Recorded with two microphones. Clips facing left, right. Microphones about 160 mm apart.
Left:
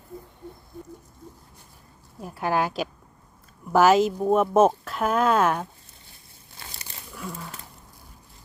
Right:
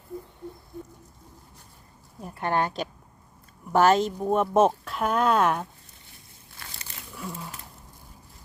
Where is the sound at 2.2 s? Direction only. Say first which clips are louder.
Left 1 dB; 5° left (ahead or behind).